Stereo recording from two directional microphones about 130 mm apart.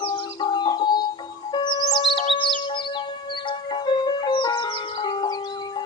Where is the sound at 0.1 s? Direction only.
35° left (ahead or behind).